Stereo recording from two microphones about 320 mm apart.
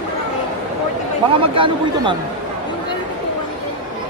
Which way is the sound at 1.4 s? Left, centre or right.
Centre.